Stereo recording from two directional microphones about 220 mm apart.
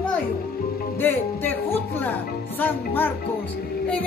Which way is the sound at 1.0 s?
10° left (ahead or behind).